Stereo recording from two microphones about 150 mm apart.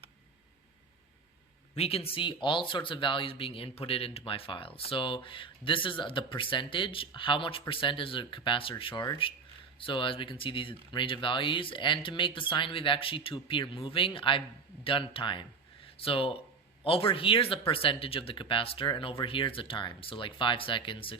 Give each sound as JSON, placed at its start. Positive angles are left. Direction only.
{"t": 1.7, "sound": "speech", "side_deg": 40}